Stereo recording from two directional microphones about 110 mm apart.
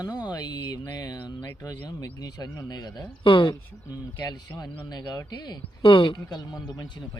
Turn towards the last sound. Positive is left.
turn(degrees=35)  # may be behind; listen again after turning